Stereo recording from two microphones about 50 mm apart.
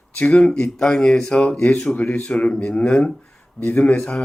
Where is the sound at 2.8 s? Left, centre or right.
Left.